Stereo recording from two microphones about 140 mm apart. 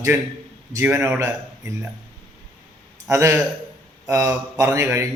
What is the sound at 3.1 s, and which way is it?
A man's voice, 20° right (ahead or behind).